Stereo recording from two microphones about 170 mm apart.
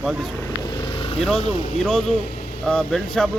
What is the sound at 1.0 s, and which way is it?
Vehicle, 35° left (ahead or behind).